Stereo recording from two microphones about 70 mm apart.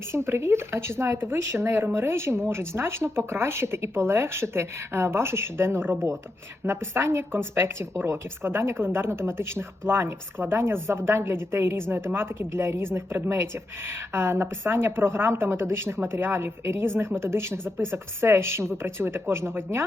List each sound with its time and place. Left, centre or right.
0.1 s a woman's voice: right